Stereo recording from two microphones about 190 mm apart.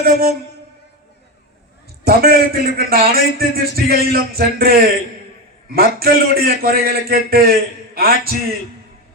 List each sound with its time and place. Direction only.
0.0 s a man's voice: 50° right (ahead or behind)
2.0 s a man's voice: 55° right (ahead or behind)